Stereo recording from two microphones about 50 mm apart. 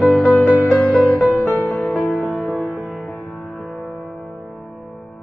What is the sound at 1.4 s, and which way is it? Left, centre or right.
Music, left.